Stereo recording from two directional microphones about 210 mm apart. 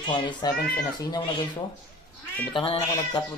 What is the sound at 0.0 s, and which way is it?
Speech, 20° left (ahead or behind).